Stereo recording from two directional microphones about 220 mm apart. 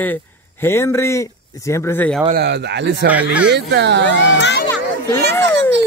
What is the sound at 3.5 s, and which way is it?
Speech, 50° right (ahead or behind).